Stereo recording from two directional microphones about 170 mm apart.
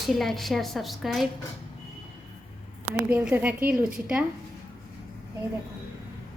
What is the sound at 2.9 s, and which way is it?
Speech, 5° right (ahead or behind).